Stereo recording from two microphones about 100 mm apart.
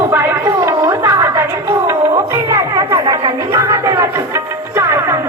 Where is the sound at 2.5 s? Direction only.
35° right (ahead or behind).